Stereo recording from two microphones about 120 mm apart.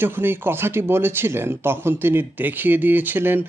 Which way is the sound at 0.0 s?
20° right (ahead or behind).